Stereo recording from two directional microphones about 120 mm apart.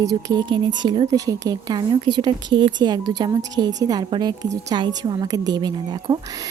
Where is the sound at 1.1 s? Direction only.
30° right (ahead or behind).